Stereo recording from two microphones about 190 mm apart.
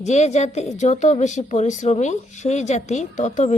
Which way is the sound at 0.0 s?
35° left (ahead or behind).